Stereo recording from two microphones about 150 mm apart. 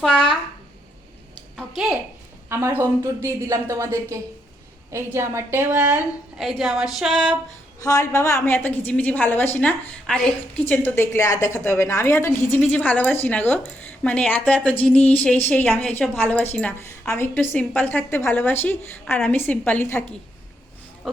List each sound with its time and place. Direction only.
1.5 s a sound: centre (ahead or behind)
2.5 s a woman's voice: 15° right (ahead or behind); by 7.3 s 5° left (ahead or behind)
7.8 s a woman's voice: 25° left (ahead or behind)